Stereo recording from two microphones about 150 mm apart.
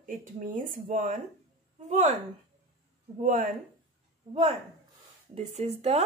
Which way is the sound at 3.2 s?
60° right (ahead or behind).